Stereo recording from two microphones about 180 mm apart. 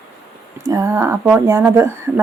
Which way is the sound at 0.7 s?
15° right (ahead or behind).